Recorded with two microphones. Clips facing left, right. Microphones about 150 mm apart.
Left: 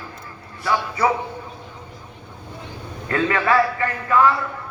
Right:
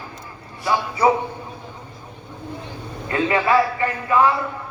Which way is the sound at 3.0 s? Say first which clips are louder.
Right 1 dB; 20° right (ahead or behind).